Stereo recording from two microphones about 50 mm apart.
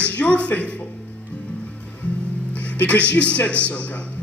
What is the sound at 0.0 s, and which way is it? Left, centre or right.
Speech, left.